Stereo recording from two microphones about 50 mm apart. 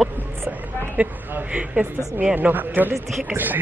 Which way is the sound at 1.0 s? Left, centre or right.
Right.